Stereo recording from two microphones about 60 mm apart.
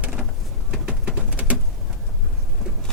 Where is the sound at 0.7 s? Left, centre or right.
Centre.